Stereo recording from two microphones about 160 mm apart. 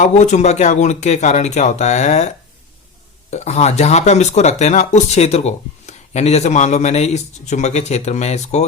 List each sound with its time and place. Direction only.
0.0 s speech: 45° left (ahead or behind)